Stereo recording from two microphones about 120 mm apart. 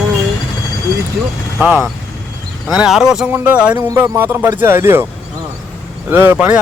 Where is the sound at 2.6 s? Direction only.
5° right (ahead or behind).